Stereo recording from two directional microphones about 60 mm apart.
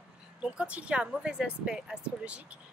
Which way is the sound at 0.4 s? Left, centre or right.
Centre.